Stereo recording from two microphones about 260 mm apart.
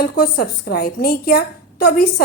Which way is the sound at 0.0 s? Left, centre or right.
Left.